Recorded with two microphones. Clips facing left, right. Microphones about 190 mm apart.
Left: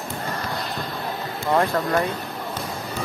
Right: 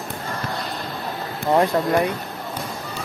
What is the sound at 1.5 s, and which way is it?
Speech, 15° right (ahead or behind).